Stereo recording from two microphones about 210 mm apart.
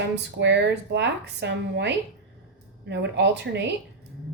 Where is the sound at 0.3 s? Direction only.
55° right (ahead or behind).